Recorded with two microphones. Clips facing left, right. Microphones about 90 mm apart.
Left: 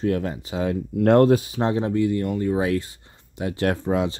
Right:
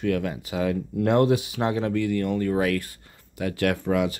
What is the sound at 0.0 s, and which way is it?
Speech, 30° left (ahead or behind).